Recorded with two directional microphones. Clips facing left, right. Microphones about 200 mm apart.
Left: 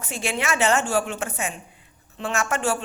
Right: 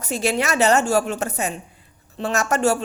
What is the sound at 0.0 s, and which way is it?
Speech, 40° right (ahead or behind).